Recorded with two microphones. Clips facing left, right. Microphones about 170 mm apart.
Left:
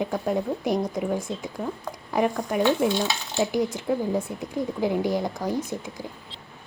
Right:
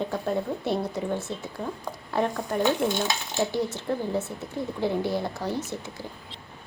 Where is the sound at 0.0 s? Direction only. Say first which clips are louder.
Left 2 dB; 10° left (ahead or behind).